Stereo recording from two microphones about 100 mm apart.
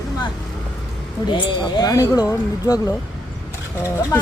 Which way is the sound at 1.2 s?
55° left (ahead or behind).